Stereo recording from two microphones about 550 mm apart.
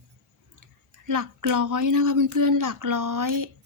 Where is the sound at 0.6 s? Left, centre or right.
Right.